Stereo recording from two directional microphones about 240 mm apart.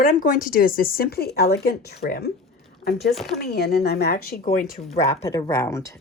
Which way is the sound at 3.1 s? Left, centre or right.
Centre.